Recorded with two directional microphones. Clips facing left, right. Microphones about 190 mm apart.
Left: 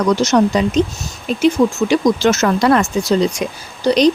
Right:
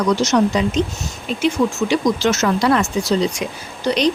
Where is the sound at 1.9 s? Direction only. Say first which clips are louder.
Left 3 dB; 50° left (ahead or behind).